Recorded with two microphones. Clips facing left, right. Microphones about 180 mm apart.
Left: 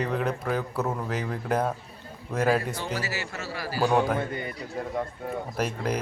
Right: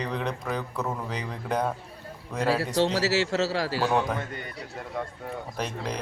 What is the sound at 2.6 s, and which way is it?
Speech, 80° right.